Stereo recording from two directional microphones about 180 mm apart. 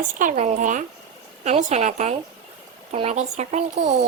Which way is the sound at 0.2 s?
40° right (ahead or behind).